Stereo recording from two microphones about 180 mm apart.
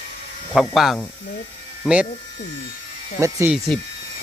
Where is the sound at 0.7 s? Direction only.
Centre (ahead or behind).